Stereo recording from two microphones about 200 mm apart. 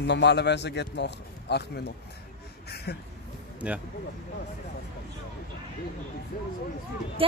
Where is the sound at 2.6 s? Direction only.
55° left (ahead or behind).